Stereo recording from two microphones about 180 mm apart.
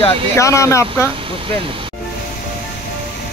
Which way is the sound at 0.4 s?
15° left (ahead or behind).